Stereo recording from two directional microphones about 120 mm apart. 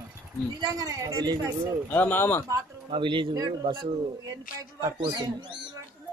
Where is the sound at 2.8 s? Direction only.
45° right (ahead or behind).